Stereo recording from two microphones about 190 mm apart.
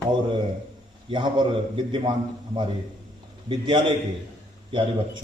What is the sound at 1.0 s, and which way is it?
Speech, 25° right (ahead or behind).